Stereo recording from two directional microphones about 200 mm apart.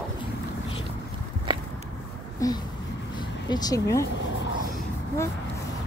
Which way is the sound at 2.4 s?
15° left (ahead or behind).